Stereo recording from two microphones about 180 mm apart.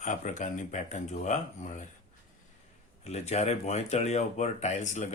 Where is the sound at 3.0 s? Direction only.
40° left (ahead or behind).